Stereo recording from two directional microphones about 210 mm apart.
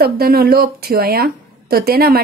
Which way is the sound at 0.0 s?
45° right (ahead or behind).